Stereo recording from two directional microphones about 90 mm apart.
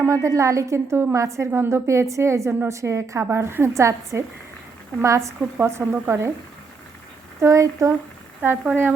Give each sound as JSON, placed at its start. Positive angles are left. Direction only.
{"t": 0.0, "sound": "a woman's voice", "side_deg": -35}
{"t": 7.4, "sound": "a woman's voice", "side_deg": -35}
{"t": 8.4, "sound": "speech", "side_deg": -20}